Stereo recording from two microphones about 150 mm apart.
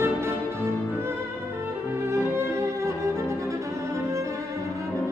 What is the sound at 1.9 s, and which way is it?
Music, 15° right (ahead or behind).